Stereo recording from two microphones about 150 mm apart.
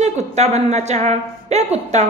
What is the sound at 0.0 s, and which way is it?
A woman's voice, 50° right (ahead or behind).